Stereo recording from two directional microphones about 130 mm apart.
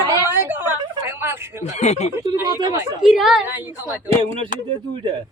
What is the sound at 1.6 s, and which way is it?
Speech, 60° left (ahead or behind).